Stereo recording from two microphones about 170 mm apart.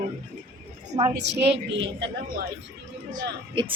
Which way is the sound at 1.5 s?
90° right.